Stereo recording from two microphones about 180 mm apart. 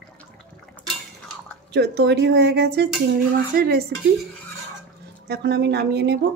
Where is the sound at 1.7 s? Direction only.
70° right (ahead or behind).